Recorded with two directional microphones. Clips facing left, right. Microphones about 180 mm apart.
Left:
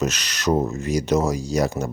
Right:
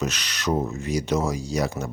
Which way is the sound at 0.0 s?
45° left (ahead or behind).